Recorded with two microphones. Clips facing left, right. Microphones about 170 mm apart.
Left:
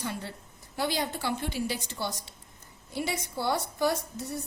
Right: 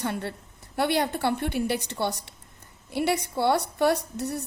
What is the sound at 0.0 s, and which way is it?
A woman's voice, 60° right (ahead or behind).